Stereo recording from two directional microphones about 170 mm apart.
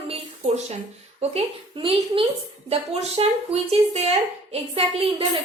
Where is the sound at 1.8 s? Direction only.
35° right (ahead or behind).